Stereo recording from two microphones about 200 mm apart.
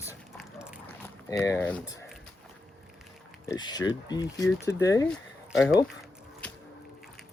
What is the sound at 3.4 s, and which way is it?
Speech, 20° left (ahead or behind).